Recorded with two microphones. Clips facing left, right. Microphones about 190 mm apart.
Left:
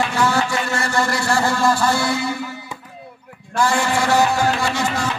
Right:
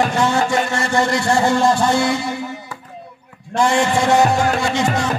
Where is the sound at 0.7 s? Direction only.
20° right (ahead or behind).